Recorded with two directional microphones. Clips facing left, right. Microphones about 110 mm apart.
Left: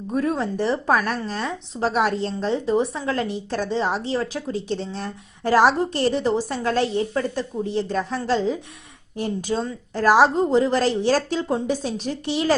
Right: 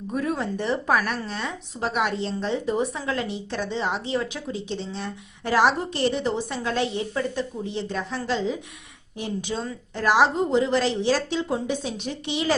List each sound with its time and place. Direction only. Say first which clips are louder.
0.5 s a woman's voice: left 2 dB; 35° left (ahead or behind)